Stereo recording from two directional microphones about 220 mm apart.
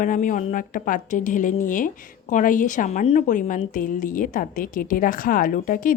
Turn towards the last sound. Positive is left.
turn(degrees=40)  # may be behind; listen again after turning